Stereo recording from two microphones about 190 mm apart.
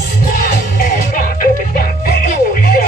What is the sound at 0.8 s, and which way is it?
Music, 50° left (ahead or behind).